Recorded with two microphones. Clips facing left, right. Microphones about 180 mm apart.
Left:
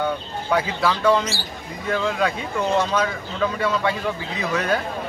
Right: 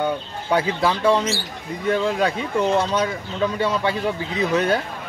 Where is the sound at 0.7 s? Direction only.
30° right (ahead or behind).